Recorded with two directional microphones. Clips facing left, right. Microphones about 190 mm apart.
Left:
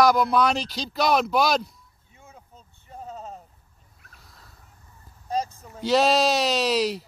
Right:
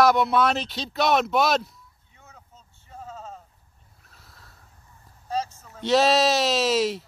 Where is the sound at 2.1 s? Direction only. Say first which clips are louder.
Left 3 dB; 10° left (ahead or behind).